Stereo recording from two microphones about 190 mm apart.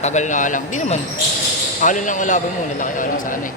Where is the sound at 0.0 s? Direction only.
40° left (ahead or behind).